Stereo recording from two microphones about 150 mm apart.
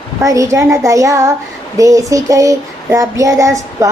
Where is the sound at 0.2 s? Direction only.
20° right (ahead or behind).